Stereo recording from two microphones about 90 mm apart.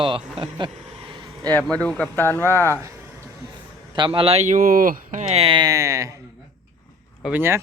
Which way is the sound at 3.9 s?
70° right (ahead or behind).